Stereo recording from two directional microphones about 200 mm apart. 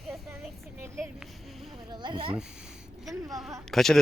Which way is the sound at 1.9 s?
20° right (ahead or behind).